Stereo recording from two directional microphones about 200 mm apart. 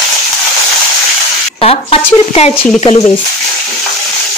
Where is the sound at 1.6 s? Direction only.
30° left (ahead or behind).